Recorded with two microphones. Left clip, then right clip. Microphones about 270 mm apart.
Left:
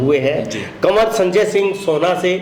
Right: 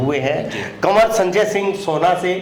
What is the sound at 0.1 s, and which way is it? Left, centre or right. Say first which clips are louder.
A man's voice: left 4 dB; centre.